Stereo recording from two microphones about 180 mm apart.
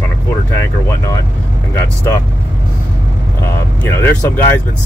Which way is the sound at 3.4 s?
15° left (ahead or behind).